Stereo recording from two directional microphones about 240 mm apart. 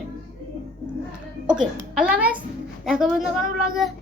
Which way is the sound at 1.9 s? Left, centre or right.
Centre.